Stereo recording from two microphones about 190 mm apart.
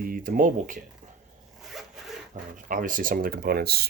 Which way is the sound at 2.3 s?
45° right (ahead or behind).